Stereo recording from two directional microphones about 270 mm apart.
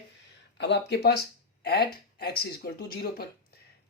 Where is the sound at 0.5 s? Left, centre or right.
Left.